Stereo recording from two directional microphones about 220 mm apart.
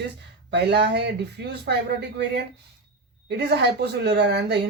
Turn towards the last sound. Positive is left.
turn(degrees=-50)  # may be behind; listen again after turning